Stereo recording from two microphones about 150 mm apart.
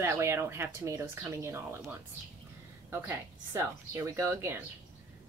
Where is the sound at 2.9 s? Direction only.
15° right (ahead or behind).